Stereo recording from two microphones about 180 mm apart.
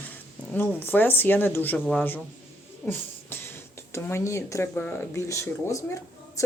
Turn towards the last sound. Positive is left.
turn(degrees=15)  # may be behind; listen again after turning